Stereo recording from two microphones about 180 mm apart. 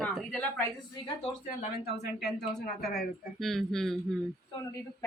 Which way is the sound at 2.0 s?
60° left (ahead or behind).